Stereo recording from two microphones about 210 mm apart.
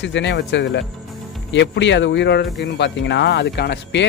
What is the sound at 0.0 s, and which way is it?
Speech, 60° left (ahead or behind).